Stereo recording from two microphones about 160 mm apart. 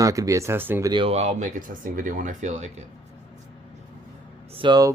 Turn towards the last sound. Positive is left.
turn(degrees=-30)  # may be behind; listen again after turning